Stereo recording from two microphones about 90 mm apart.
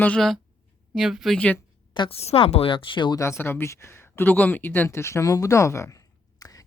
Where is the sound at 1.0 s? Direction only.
Centre (ahead or behind).